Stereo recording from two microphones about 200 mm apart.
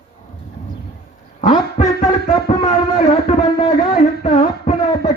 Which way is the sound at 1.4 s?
40° left (ahead or behind).